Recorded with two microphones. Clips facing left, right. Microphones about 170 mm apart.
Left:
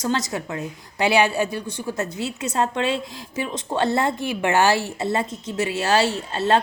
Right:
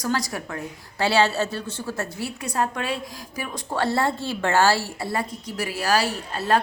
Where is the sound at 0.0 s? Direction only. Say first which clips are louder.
Left 2 dB; 20° left (ahead or behind).